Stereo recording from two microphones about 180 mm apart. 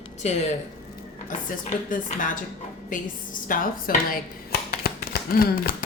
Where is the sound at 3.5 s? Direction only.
50° left (ahead or behind).